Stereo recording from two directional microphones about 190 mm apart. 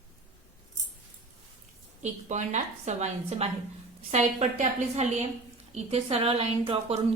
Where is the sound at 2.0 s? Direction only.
40° right (ahead or behind).